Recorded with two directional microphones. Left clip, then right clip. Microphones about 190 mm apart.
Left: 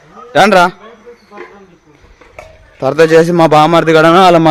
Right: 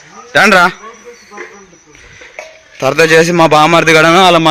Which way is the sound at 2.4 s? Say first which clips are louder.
Right 4 dB; 60° left (ahead or behind).